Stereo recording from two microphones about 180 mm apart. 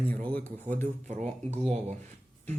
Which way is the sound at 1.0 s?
40° right (ahead or behind).